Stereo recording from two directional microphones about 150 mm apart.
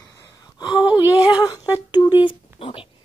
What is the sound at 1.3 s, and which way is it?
Speech, 25° left (ahead or behind).